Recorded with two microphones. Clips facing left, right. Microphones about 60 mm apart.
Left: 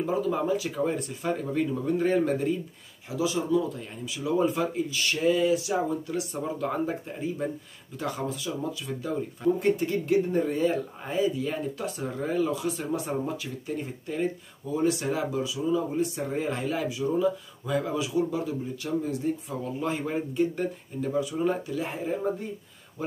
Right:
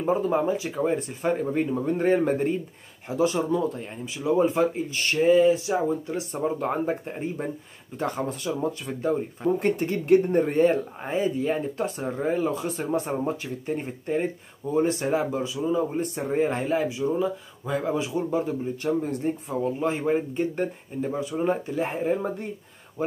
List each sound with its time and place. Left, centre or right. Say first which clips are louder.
0.0 s speech: right 3 dB; right
3.8 s speech: right 4 dB; right
11.0 s speech: right 1 dB; right
19.5 s speech: right 4 dB; right
22.0 s speech: right 3 dB; right
23.0 s speech: right 4 dB; right